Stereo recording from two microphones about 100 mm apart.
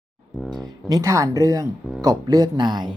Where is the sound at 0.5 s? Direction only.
40° right (ahead or behind).